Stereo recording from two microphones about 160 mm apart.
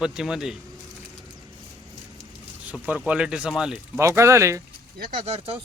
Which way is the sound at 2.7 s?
10° right (ahead or behind).